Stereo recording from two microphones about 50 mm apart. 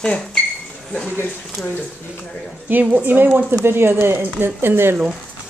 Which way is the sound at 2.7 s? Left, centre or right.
Right.